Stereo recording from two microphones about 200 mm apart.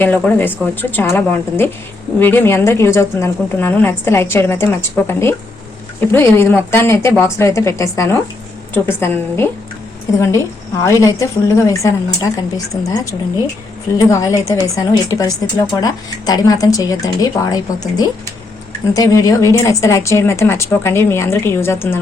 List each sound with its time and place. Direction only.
0.0 s a woman's voice: 10° left (ahead or behind)